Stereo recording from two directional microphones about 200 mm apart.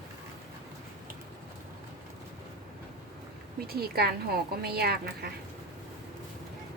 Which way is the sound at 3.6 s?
50° right (ahead or behind).